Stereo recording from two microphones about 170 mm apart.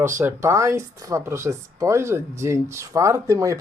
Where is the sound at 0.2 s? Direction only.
15° right (ahead or behind).